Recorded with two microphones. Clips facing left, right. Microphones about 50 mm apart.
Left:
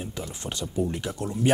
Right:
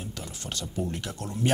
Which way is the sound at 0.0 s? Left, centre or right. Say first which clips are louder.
Left 4 dB; left.